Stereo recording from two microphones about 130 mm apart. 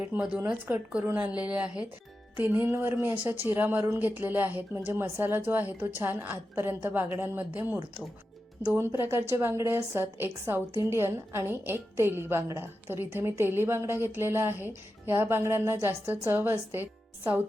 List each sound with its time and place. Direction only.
0.0 s a woman's voice: 10° right (ahead or behind)